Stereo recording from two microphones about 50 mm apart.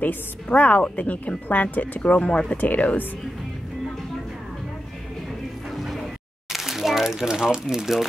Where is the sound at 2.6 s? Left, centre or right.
Left.